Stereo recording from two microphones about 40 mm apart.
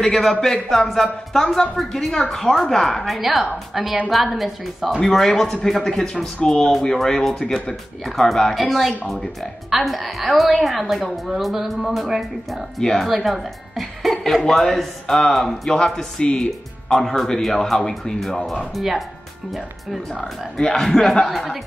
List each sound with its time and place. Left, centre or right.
0.0 s a woman's voice: centre
5.1 s speech: centre
6.4 s speech: centre
6.7 s a woman's voice: centre
14.5 s a woman's voice: centre
15.7 s speech: centre
18.6 s a woman's voice: centre
20.7 s a woman's voice: centre